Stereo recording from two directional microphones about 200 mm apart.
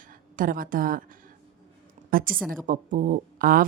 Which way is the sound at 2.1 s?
45° right (ahead or behind).